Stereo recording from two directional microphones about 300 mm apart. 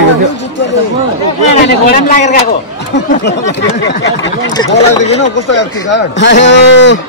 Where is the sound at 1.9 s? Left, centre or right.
Left.